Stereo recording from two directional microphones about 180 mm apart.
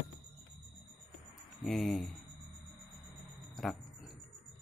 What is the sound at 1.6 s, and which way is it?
Speech, centre (ahead or behind).